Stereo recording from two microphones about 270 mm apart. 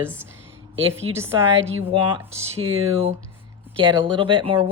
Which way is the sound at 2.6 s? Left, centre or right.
Right.